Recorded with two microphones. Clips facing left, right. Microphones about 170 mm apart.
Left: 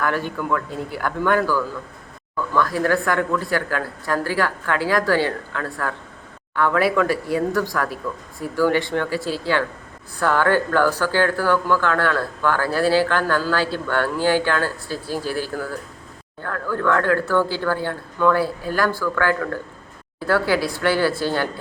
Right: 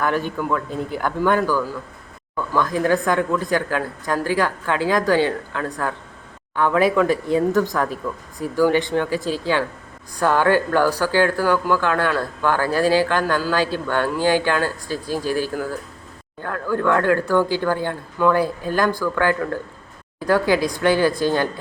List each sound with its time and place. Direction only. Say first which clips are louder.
0.0 s a woman's voice: right 2 dB; 20° right (ahead or behind)